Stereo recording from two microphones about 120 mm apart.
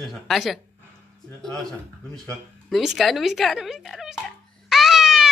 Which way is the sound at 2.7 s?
Centre (ahead or behind).